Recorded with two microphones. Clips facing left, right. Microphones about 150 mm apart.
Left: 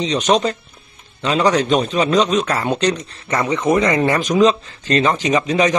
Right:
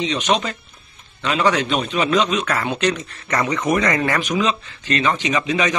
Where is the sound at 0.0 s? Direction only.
40° left (ahead or behind).